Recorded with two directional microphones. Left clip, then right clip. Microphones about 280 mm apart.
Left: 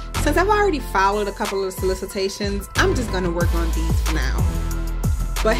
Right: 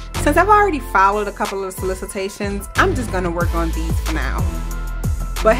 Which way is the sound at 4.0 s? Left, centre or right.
Centre.